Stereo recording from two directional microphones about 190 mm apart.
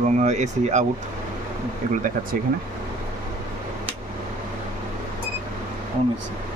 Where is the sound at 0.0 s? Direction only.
40° right (ahead or behind).